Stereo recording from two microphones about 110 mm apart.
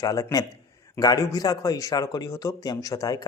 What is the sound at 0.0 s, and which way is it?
Speech, 35° left (ahead or behind).